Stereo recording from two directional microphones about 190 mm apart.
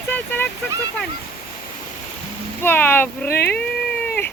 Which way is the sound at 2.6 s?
10° left (ahead or behind).